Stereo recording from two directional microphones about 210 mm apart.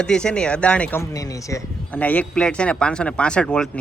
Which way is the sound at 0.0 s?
5° left (ahead or behind).